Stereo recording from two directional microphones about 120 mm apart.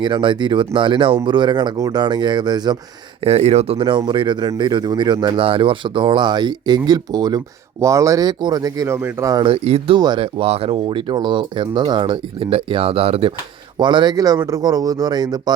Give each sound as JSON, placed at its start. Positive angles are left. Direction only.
{"t": 0.0, "sound": "speech", "side_deg": -40}
{"t": 3.2, "sound": "speech", "side_deg": -60}
{"t": 3.8, "sound": "speech", "side_deg": -40}
{"t": 9.3, "sound": "speech", "side_deg": -40}
{"t": 9.6, "sound": "speech", "side_deg": -50}
{"t": 10.0, "sound": "speech", "side_deg": -40}
{"t": 13.7, "sound": "speech", "side_deg": -40}